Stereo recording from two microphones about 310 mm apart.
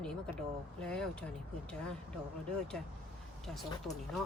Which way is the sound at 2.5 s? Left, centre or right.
Centre.